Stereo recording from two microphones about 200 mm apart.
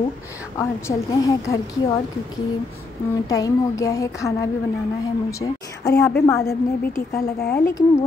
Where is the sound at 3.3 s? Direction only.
15° left (ahead or behind).